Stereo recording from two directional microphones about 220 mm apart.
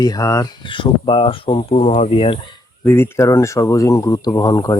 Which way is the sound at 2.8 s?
10° left (ahead or behind).